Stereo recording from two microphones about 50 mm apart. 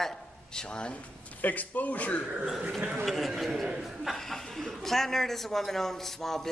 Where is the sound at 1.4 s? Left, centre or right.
Left.